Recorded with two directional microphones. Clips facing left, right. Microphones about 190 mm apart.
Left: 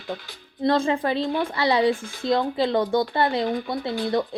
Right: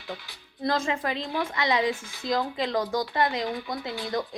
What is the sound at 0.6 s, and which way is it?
Speech, 30° left (ahead or behind).